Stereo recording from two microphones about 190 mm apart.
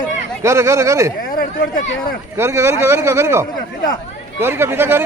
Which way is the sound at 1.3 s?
50° left (ahead or behind).